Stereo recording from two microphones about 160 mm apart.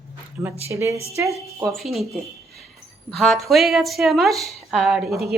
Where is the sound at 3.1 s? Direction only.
Centre (ahead or behind).